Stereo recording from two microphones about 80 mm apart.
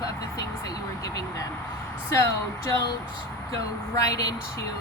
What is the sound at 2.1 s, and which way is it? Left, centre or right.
Speech, left.